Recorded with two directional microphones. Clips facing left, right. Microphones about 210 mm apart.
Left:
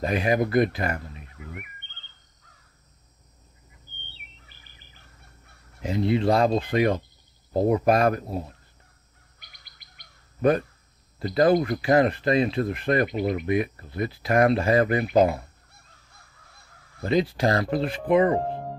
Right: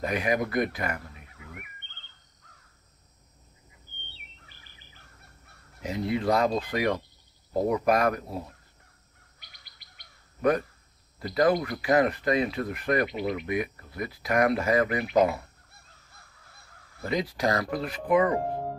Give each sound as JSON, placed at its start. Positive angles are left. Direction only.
{"t": 0.0, "sound": "speech", "side_deg": 30}
{"t": 5.8, "sound": "speech", "side_deg": 25}
{"t": 11.1, "sound": "speech", "side_deg": 25}
{"t": 13.0, "sound": "speech", "side_deg": 45}
{"t": 13.5, "sound": "speech", "side_deg": 30}
{"t": 15.7, "sound": "crow", "side_deg": 0}
{"t": 17.1, "sound": "speech", "side_deg": 30}